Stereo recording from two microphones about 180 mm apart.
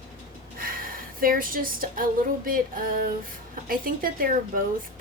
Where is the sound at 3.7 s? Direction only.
55° right (ahead or behind).